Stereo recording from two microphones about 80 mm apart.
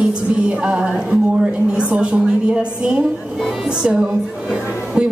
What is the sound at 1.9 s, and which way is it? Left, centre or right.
A man's voice, centre.